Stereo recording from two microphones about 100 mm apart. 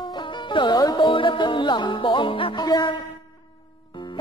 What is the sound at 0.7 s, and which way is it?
Music, 40° left (ahead or behind).